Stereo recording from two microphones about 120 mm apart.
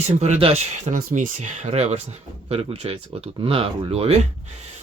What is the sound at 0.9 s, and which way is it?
Speech, 90° right.